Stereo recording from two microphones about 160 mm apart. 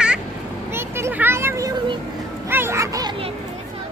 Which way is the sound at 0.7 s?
15° right (ahead or behind).